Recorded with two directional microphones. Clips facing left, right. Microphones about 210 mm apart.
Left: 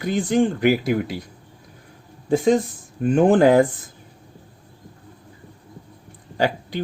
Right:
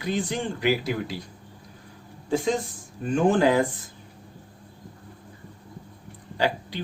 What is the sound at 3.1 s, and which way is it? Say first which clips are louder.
Speech: left 6 dB; 55° left (ahead or behind).